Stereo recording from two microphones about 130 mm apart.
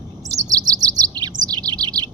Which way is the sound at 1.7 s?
35° right (ahead or behind).